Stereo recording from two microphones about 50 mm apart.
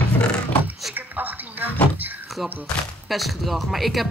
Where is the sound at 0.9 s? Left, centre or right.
Right.